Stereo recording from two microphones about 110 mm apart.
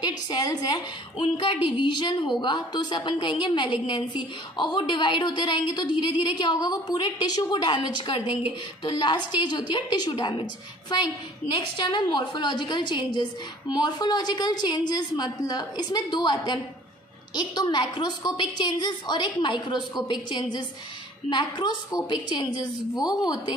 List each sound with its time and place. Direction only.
0.3 s a woman's voice: 35° left (ahead or behind)
1.2 s a woman's voice: 45° left (ahead or behind)